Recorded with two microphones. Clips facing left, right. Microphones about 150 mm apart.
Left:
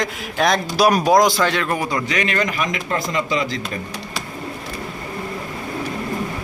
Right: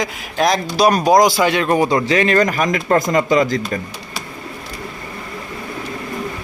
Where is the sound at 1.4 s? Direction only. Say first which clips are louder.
Right 5 dB; 15° right (ahead or behind); by 3.6 s 45° right (ahead or behind).